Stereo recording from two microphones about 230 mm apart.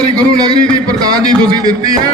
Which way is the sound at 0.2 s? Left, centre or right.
Centre.